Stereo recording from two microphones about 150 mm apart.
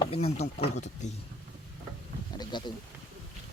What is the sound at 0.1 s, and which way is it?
Speech, 45° left (ahead or behind).